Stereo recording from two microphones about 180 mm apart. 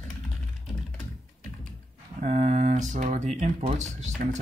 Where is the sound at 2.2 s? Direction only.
40° right (ahead or behind).